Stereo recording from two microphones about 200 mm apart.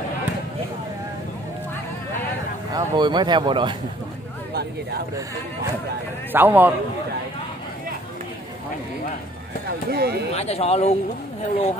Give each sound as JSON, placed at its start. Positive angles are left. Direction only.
{"t": 2.7, "sound": "speech", "side_deg": -20}
{"t": 6.3, "sound": "a man's voice", "side_deg": -10}
{"t": 9.7, "sound": "speech", "side_deg": -50}
{"t": 10.3, "sound": "speech", "side_deg": 30}